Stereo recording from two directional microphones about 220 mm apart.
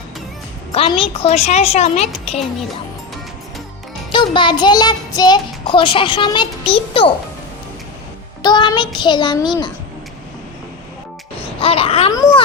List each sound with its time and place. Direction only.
0.7 s a child's voice: 25° left (ahead or behind)
4.1 s a child's voice: 20° left (ahead or behind)
8.4 s a child's voice: 20° left (ahead or behind)
11.4 s speech: 25° left (ahead or behind)